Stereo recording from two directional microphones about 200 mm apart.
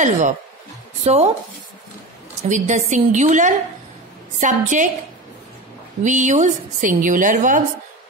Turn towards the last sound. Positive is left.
turn(degrees=-40)  # may be behind; listen again after turning